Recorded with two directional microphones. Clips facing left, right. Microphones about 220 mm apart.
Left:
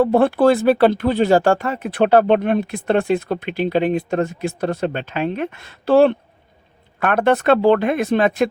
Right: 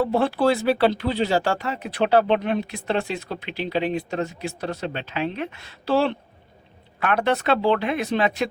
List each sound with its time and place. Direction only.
0.0 s speech: 55° left (ahead or behind)